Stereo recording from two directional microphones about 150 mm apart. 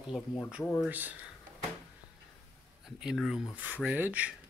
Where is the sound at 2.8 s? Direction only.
Centre (ahead or behind).